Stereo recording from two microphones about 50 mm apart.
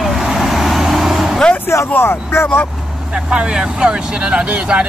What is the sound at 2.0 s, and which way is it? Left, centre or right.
Speech, left.